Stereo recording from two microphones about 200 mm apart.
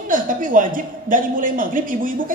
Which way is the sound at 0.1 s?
40° right (ahead or behind).